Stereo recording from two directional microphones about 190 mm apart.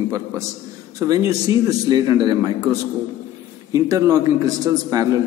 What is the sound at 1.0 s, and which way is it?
A man's voice, 20° right (ahead or behind).